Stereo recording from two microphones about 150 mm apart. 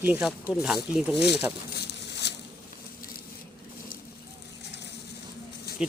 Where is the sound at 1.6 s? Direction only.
90° left.